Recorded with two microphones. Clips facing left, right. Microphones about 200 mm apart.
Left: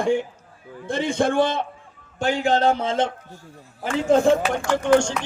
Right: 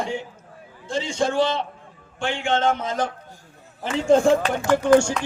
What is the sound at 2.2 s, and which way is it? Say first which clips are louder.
Speech: left 3 dB; 40° left (ahead or behind).